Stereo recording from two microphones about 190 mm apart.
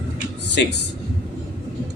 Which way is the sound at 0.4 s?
65° left (ahead or behind).